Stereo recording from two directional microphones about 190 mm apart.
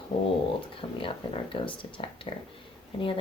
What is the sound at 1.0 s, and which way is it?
Speech, 25° left (ahead or behind).